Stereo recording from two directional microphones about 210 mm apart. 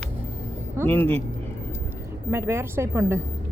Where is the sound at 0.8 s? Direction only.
10° left (ahead or behind).